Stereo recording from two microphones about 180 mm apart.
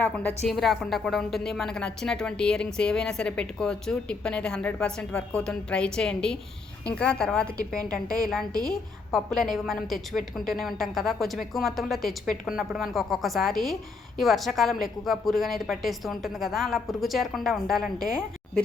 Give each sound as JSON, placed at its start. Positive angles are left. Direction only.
{"t": 0.0, "sound": "a woman's voice", "side_deg": 10}